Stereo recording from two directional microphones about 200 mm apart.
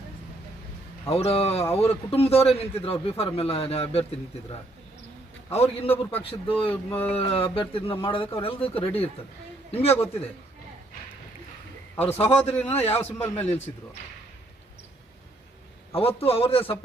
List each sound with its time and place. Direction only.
1.1 s a man's voice: 30° left (ahead or behind)
5.8 s a man's voice: 30° left (ahead or behind)
6.1 s speech: 10° left (ahead or behind)
7.1 s a man's voice: 30° left (ahead or behind)
11.9 s speech: 10° left (ahead or behind)
16.0 s a man's voice: 30° left (ahead or behind)